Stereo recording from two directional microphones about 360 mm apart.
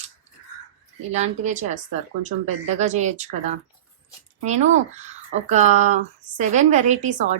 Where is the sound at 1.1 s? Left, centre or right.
Centre.